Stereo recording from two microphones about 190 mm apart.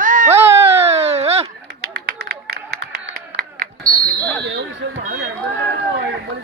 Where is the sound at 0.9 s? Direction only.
35° right (ahead or behind).